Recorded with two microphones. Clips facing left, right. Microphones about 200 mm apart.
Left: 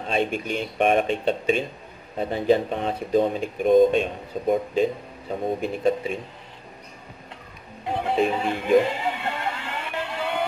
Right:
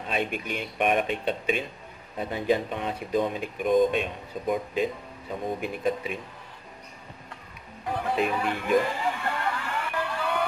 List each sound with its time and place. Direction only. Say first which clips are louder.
0.0 s speech: left 5 dB; 30° left (ahead or behind)
7.8 s neigh: left 4 dB; 25° left (ahead or behind)